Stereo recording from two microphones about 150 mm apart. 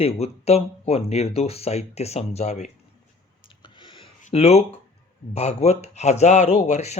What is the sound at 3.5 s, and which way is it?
Clicking, 35° left (ahead or behind).